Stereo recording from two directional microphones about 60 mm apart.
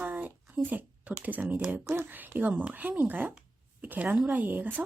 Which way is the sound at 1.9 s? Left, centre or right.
Right.